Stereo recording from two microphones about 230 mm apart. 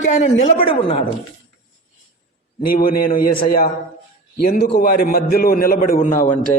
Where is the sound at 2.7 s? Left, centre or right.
Left.